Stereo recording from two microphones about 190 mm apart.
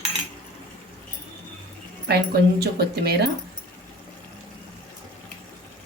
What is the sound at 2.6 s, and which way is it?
Speech, 60° right (ahead or behind).